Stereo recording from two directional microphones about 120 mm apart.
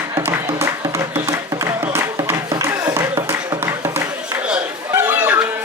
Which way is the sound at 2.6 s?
20° right (ahead or behind).